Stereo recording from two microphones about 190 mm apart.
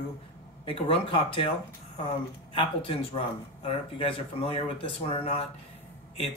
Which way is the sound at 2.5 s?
30° left (ahead or behind).